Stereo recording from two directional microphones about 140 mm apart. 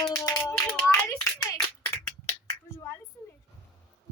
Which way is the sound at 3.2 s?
15° left (ahead or behind).